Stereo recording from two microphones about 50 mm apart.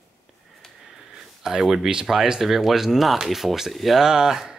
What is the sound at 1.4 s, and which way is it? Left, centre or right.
Speech, centre.